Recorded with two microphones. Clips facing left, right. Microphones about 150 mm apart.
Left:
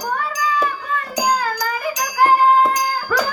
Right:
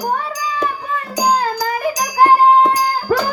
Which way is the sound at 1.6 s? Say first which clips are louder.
Right 4 dB; 30° right (ahead or behind).